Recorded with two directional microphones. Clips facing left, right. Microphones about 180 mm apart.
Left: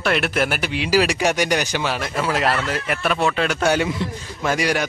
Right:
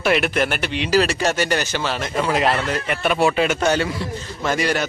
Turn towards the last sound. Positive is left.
turn(degrees=10)  # may be behind; listen again after turning